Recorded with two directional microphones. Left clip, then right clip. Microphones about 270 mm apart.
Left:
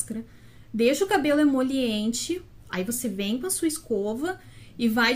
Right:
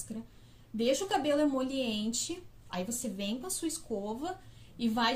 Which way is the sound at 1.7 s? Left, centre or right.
Right.